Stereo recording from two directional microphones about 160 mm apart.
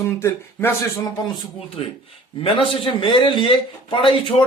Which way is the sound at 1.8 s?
35° left (ahead or behind).